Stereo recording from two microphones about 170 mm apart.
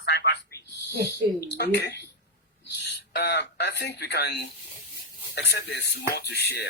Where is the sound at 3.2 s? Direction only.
85° left.